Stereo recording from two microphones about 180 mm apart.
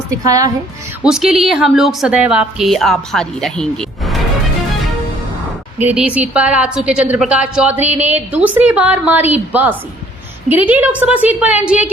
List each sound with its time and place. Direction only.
0.3 s a woman's voice: 20° right (ahead or behind)
1.0 s a woman's voice: 5° right (ahead or behind)
5.8 s a woman's voice: 5° right (ahead or behind)